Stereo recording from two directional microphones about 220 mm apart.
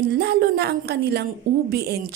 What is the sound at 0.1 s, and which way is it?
Music, 45° right (ahead or behind).